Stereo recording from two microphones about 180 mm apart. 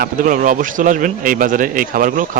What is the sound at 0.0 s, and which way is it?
Speech, 50° right (ahead or behind).